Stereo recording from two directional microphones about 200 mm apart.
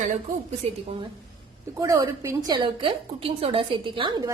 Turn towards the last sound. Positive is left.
turn(degrees=-20)  # may be behind; listen again after turning